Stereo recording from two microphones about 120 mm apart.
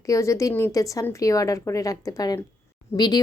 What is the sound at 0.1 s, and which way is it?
Speech, 25° left (ahead or behind).